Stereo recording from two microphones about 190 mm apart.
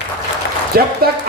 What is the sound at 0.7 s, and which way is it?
Speech, 50° right (ahead or behind).